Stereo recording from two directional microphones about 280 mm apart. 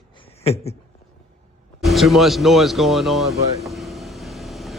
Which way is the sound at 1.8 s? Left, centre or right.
Centre.